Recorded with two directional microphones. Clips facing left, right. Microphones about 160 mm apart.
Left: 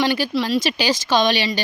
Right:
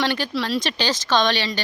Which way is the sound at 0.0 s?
5° left (ahead or behind).